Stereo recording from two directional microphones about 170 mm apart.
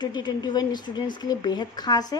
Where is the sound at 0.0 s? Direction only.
25° left (ahead or behind).